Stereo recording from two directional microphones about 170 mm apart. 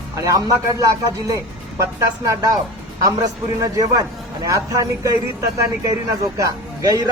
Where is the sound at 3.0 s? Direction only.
20° right (ahead or behind).